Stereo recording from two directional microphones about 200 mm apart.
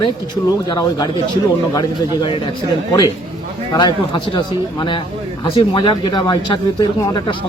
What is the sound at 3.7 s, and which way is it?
Speech, 25° left (ahead or behind).